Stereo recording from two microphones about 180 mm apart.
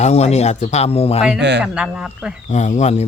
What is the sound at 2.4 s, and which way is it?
Speech, 40° left (ahead or behind).